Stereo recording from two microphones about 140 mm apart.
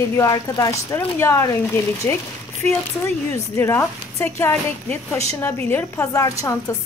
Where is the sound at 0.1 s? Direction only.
25° left (ahead or behind).